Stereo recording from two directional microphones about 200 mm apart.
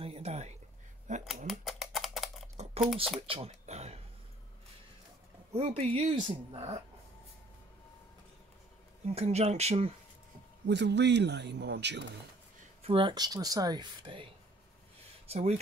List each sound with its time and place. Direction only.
0.0 s a sound: 30° right (ahead or behind)
1.5 s typing: centre (ahead or behind)
2.5 s typing: 35° right (ahead or behind)
3.2 s a sound: 30° right (ahead or behind)
5.5 s speech: 30° right (ahead or behind)
9.0 s speech: 30° right (ahead or behind)
10.7 s a man's voice: 60° right (ahead or behind)
12.8 s speech: 25° right (ahead or behind)